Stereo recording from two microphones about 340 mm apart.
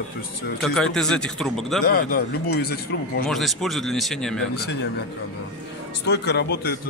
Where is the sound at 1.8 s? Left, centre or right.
Left.